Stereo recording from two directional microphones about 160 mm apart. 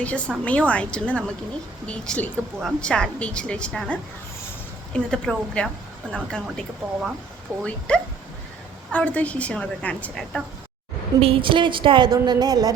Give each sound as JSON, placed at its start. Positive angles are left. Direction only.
{"t": 0.0, "sound": "a woman's voice", "side_deg": 10}
{"t": 4.9, "sound": "a woman's voice", "side_deg": 5}
{"t": 11.2, "sound": "a woman's voice", "side_deg": -35}